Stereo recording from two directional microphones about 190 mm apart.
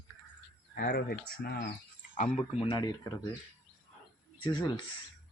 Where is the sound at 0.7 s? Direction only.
55° left (ahead or behind).